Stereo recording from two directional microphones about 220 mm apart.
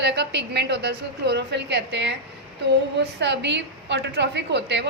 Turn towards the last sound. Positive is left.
turn(degrees=-50)  # may be behind; listen again after turning